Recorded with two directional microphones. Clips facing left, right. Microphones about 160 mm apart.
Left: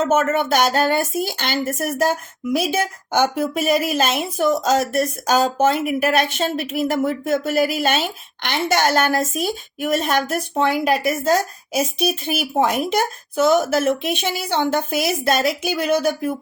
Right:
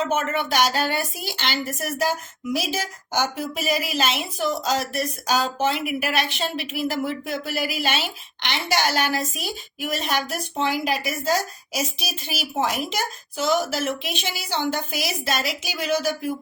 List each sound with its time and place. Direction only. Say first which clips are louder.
0.0 s a woman's voice: left 6 dB; 45° left (ahead or behind)